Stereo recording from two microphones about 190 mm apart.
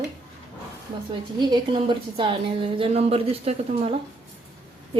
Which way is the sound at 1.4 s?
25° right (ahead or behind).